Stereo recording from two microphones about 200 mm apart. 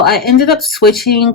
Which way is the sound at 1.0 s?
50° left (ahead or behind).